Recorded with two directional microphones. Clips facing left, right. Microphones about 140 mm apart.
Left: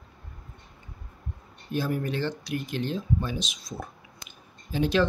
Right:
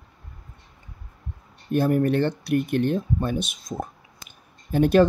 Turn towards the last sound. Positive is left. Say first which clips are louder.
# right 7 dB
turn(degrees=-55)  # may be behind; listen again after turning